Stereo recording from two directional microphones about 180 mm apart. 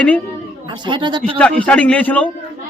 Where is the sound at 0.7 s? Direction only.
25° right (ahead or behind).